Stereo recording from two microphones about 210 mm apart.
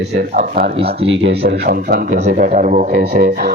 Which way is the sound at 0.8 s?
25° right (ahead or behind).